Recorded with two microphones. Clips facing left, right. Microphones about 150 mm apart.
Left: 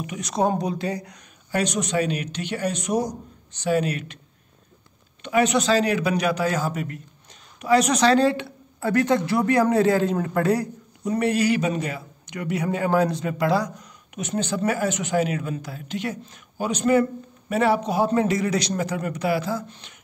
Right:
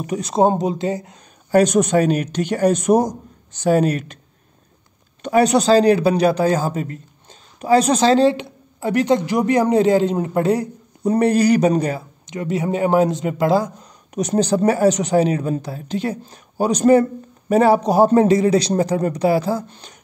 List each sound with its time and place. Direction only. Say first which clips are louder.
0.0 s a man's voice: right 7 dB; 35° right (ahead or behind)
1.5 s a man's voice: right 10 dB; 45° right (ahead or behind)
5.2 s a man's voice: right 5 dB; 35° right (ahead or behind); by 10.7 s 20° right (ahead or behind)
11.1 s a man's voice: right 6 dB; 35° right (ahead or behind)
12.3 s a man's voice: right 4 dB; 25° right (ahead or behind)